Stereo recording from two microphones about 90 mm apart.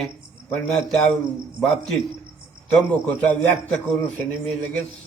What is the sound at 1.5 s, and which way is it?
Speech, 5° left (ahead or behind).